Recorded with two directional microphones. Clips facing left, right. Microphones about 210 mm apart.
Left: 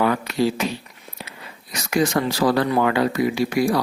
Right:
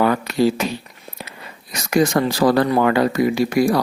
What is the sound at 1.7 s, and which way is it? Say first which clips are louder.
Speech: right 3 dB; 45° right (ahead or behind).